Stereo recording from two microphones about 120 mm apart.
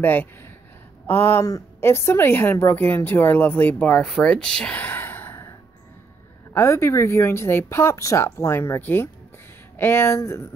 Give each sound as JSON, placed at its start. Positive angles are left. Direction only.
{"t": 0.0, "sound": "a woman's voice", "side_deg": 15}
{"t": 6.5, "sound": "speech", "side_deg": 20}